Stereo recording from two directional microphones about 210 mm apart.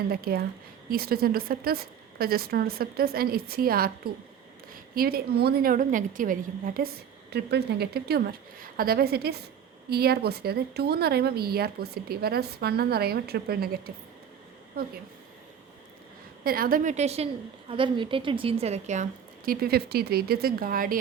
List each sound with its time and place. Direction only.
0.1 s a woman's voice: 45° right (ahead or behind)
16.4 s a woman's voice: 45° right (ahead or behind)
19.5 s a woman's voice: 50° right (ahead or behind)